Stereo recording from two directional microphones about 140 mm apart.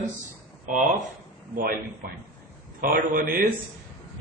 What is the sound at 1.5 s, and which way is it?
A man's voice, 90° right.